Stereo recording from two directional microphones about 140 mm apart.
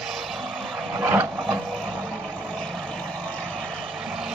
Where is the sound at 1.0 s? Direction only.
15° right (ahead or behind).